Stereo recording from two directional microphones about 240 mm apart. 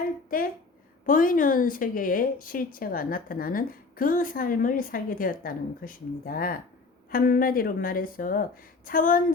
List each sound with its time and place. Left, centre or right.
1.0 s a woman's voice: left